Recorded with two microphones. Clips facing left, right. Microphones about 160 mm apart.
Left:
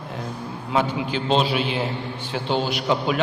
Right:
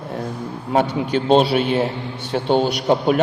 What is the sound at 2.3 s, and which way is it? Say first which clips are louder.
Speech: right 6 dB; 50° right (ahead or behind).